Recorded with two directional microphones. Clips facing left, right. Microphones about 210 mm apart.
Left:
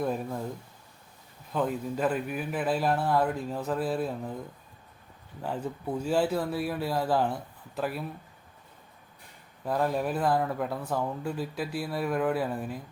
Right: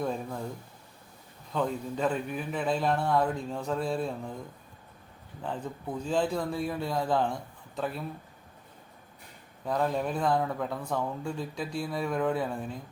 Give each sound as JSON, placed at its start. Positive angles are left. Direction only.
{"t": 0.0, "sound": "speech", "side_deg": 5}
{"t": 1.5, "sound": "speech", "side_deg": 5}
{"t": 5.4, "sound": "speech", "side_deg": 10}
{"t": 9.6, "sound": "speech", "side_deg": 5}